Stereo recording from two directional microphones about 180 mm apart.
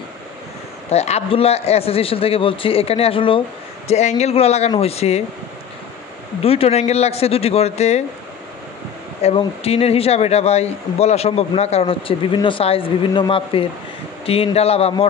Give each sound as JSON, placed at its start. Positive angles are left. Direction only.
{"t": 0.8, "sound": "a man's voice", "side_deg": 35}
{"t": 6.4, "sound": "a man's voice", "side_deg": 35}
{"t": 9.2, "sound": "a man's voice", "side_deg": 30}